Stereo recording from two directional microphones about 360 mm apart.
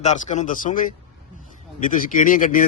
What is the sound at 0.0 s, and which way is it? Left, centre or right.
Speech, centre.